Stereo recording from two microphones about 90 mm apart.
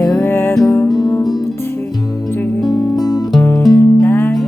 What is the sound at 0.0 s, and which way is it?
Music, 35° left (ahead or behind).